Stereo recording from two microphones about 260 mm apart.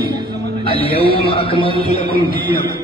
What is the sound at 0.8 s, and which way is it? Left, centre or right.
Music, left.